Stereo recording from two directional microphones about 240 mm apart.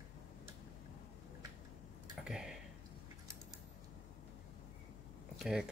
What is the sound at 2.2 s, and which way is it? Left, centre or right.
Tick-tock, centre.